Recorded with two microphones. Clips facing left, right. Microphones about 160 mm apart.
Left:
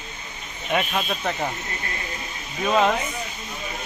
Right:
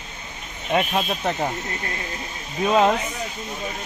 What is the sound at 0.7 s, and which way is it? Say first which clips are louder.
Speech: right 3 dB; 25° right (ahead or behind).